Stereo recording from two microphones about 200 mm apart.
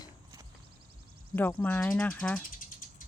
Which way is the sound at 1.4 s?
10° left (ahead or behind).